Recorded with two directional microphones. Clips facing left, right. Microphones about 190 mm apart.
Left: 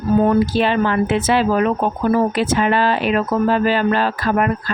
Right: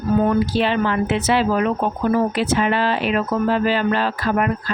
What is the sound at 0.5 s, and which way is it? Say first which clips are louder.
Speech: left 2 dB; 45° left (ahead or behind).